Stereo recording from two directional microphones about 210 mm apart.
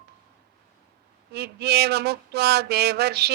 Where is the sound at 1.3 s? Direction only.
50° right (ahead or behind).